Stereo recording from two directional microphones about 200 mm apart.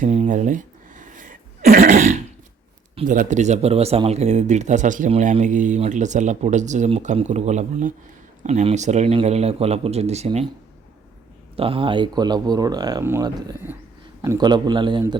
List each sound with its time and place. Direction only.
0.0 s sneeze: 35° right (ahead or behind)
3.1 s speech: 40° right (ahead or behind)
11.5 s speech: 25° right (ahead or behind)